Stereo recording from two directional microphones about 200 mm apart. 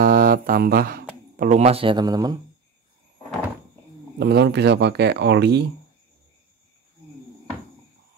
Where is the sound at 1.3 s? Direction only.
35° right (ahead or behind); by 2.4 s 20° right (ahead or behind).